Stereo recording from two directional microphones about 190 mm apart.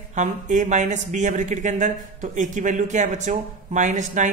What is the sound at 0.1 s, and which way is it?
A man's voice, 40° right (ahead or behind).